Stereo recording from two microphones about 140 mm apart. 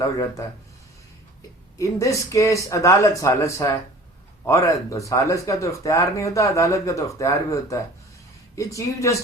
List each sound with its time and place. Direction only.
0.0 s speech: 20° left (ahead or behind)
1.8 s speech: 20° left (ahead or behind)